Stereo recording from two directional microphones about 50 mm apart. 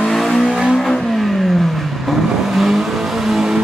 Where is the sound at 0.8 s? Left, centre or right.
Centre.